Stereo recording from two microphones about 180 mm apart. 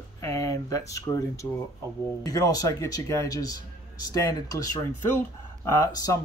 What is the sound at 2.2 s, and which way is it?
Speech, 20° left (ahead or behind).